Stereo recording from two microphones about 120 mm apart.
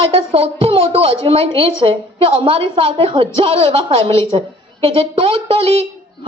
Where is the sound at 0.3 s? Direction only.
55° right (ahead or behind).